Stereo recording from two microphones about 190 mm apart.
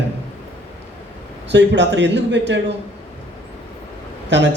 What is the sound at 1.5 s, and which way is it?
A man's voice, 65° right (ahead or behind).